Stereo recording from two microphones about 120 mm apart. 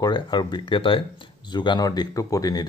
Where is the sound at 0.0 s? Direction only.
35° left (ahead or behind).